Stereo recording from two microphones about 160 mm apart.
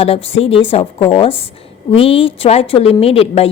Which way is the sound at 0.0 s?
40° left (ahead or behind).